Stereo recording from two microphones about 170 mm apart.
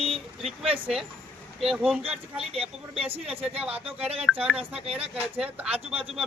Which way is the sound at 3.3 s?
35° right (ahead or behind).